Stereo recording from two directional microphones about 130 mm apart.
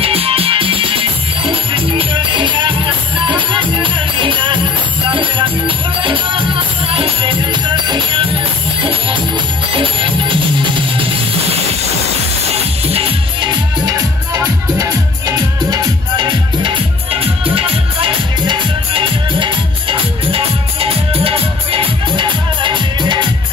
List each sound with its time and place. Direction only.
0.0 s music: 45° right (ahead or behind)
9.8 s music: 40° right (ahead or behind)
12.8 s music: 50° right (ahead or behind)